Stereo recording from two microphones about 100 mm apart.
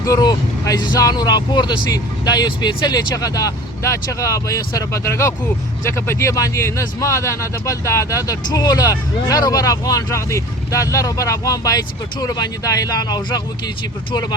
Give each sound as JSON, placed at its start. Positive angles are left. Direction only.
{"t": 0.0, "sound": "speech", "side_deg": 40}